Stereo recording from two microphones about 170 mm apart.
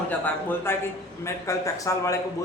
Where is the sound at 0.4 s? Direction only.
15° left (ahead or behind).